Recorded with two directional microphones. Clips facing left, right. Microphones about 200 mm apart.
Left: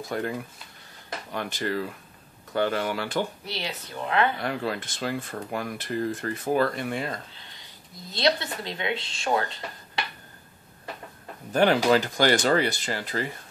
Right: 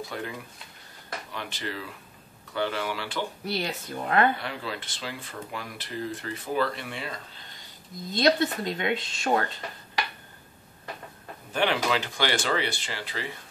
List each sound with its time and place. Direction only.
0.1 s speech: 45° left (ahead or behind)
1.3 s speech: 45° left (ahead or behind)
3.4 s speech: 45° right (ahead or behind)
4.4 s speech: 45° left (ahead or behind)
8.1 s speech: 45° right (ahead or behind)
11.5 s speech: 45° left (ahead or behind)